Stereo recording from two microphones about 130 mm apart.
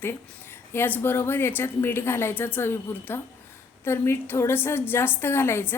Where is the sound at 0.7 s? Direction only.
15° left (ahead or behind).